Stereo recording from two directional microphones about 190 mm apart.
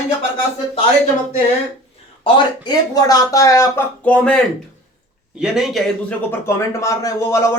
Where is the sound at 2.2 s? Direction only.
20° left (ahead or behind).